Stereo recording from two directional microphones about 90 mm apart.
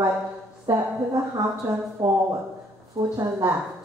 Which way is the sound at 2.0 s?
40° right (ahead or behind).